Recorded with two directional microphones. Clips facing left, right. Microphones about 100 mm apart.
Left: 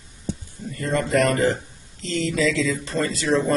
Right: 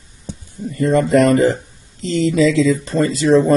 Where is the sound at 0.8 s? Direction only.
20° right (ahead or behind).